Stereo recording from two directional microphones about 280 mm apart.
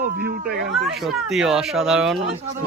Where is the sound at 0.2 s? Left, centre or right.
Right.